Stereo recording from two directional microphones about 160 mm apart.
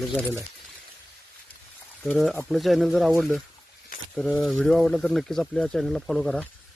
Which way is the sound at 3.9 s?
60° left (ahead or behind).